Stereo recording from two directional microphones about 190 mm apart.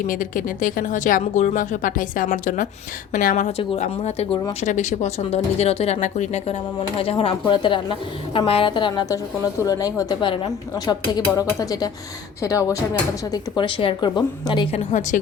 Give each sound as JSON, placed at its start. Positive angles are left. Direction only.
{"t": 0.1, "sound": "speech", "side_deg": 45}